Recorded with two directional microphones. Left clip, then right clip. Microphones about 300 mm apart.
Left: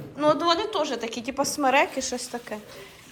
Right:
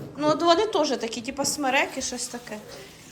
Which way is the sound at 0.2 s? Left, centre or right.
Centre.